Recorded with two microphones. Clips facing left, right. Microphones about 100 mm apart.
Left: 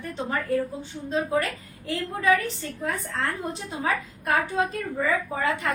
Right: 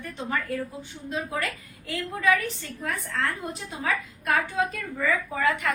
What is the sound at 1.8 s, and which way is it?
Speech, 30° left (ahead or behind).